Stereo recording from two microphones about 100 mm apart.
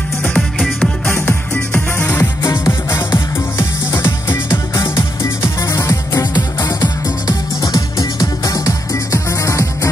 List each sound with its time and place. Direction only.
0.4 s music: centre (ahead or behind)
1.5 s music: 15° left (ahead or behind)
2.4 s music: 35° left (ahead or behind)
5.7 s music: 25° left (ahead or behind)
6.3 s music: 40° left (ahead or behind)